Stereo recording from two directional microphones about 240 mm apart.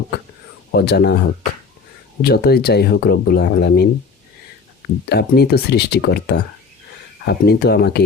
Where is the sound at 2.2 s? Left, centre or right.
Left.